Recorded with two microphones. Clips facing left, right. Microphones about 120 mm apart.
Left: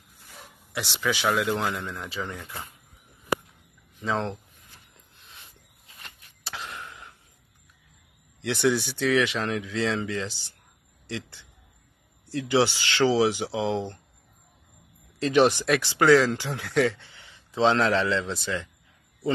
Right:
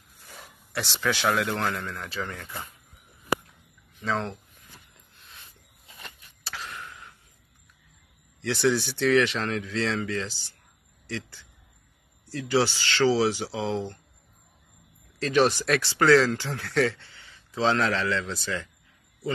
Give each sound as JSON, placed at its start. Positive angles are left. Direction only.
{"t": 0.7, "sound": "a man's voice", "side_deg": 5}
{"t": 4.0, "sound": "speech", "side_deg": 20}
{"t": 6.4, "sound": "a sound", "side_deg": 20}
{"t": 8.4, "sound": "a man's voice", "side_deg": 20}
{"t": 15.1, "sound": "speech", "side_deg": 20}